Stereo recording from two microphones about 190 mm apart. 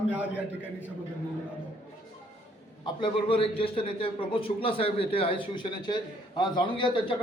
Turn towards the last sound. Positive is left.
turn(degrees=25)  # may be behind; listen again after turning